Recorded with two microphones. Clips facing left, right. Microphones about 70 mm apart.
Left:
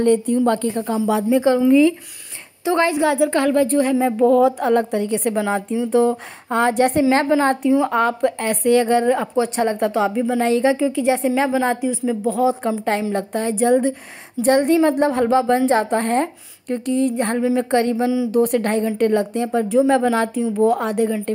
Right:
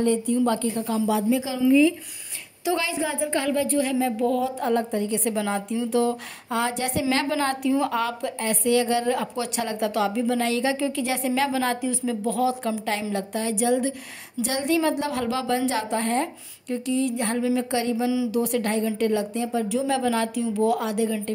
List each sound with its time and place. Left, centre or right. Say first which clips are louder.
0.0 s speech: left 6 dB; left
0.4 s a woman's voice: left 5 dB; left
3.1 s speech: left 8 dB; left
4.4 s a woman's voice: left 8 dB; left
5.3 s speech: left 5 dB; left
6.6 s speech: left 11 dB; left
7.0 s speech: left 8 dB; left
9.0 s speech: left 7 dB; left
19.8 s speech: left 9 dB; left